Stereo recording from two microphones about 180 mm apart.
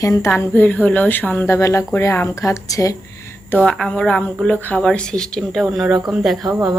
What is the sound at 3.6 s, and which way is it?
A woman's voice, 5° left (ahead or behind).